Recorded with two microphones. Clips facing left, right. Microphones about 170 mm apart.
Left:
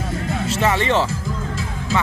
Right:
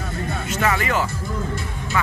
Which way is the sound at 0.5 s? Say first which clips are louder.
Left 3 dB; 25° left (ahead or behind).